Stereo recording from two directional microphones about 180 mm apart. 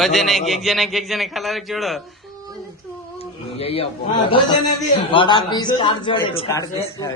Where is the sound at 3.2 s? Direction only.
35° left (ahead or behind).